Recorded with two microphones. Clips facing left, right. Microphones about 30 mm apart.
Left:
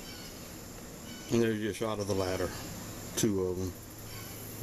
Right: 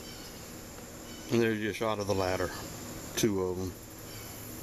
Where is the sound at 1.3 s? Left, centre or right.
Centre.